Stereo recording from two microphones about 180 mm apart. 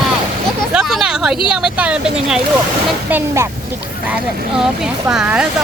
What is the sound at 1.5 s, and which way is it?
Speech, 5° right (ahead or behind).